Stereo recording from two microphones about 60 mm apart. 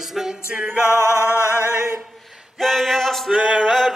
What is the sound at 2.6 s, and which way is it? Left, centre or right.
Chant, centre.